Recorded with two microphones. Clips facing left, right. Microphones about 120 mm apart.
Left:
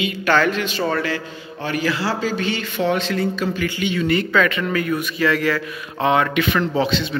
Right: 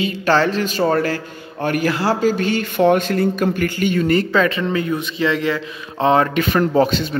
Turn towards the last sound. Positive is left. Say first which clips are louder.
# right 4 dB
turn(degrees=-45)  # may be behind; listen again after turning